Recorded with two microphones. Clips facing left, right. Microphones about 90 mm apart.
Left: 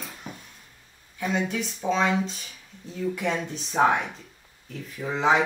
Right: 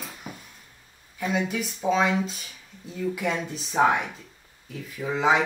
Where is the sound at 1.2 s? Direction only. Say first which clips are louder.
Even; 5° right (ahead or behind).